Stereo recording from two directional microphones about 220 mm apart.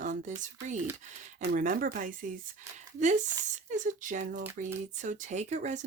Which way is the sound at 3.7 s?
35° right (ahead or behind).